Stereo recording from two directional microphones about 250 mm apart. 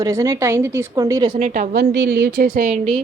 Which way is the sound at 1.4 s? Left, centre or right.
Right.